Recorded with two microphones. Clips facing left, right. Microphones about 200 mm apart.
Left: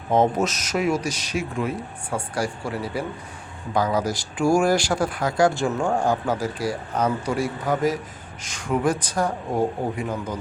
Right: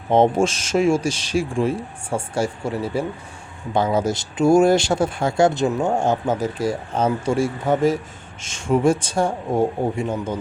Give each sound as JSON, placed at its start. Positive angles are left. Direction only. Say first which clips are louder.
{"t": 0.1, "sound": "speech", "louder": "right 4 dB", "side_deg": -30}